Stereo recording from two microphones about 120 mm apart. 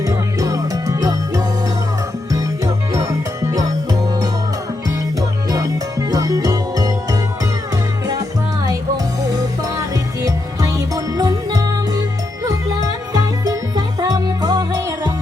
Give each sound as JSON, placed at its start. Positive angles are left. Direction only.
{"t": 0.0, "sound": "music", "side_deg": -30}
{"t": 5.5, "sound": "music", "side_deg": -30}
{"t": 9.9, "sound": "music", "side_deg": -30}